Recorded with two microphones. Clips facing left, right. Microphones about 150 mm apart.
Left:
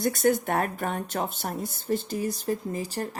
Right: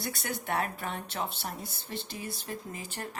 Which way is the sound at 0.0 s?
45° left (ahead or behind).